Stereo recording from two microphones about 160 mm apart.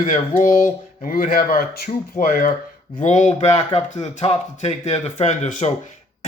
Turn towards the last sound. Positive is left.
turn(degrees=45)  # may be behind; listen again after turning